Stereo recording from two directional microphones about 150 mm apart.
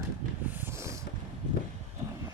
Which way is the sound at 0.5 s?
15° right (ahead or behind).